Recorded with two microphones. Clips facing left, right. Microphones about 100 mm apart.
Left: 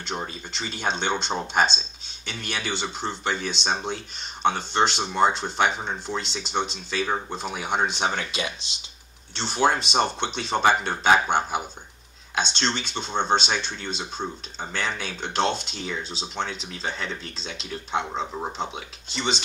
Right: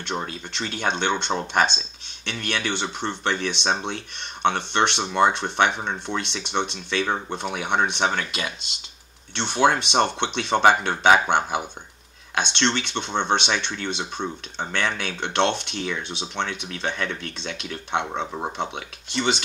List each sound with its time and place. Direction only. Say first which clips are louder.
0.0 s speech: right 2 dB; 60° right (ahead or behind)